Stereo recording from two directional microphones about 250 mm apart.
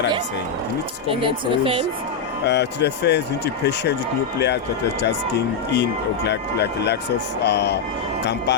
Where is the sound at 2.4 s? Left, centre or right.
Left.